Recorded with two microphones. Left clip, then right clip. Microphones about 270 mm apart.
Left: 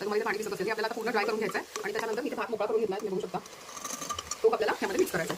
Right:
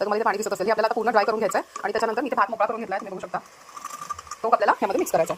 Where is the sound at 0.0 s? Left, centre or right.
Right.